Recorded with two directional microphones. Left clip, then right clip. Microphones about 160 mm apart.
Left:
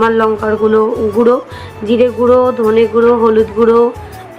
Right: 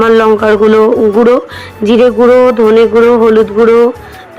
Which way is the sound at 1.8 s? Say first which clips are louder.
Right 5 dB; 40° right (ahead or behind).